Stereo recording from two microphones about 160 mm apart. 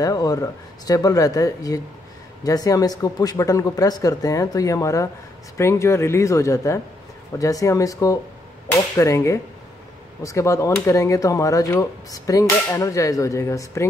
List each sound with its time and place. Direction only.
0.0 s speech: 20° left (ahead or behind)